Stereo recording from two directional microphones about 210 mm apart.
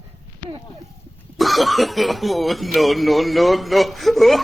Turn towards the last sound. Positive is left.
turn(degrees=0)  # may be behind; listen again after turning